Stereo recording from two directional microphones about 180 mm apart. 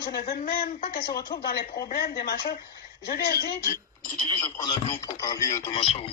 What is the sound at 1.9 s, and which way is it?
Speech, 55° left (ahead or behind).